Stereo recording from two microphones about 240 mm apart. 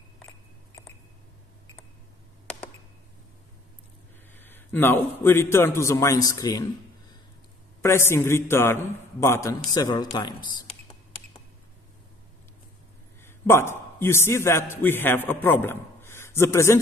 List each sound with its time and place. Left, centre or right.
4.3 s a man's voice: centre
7.8 s a man's voice: centre
13.2 s a man's voice: centre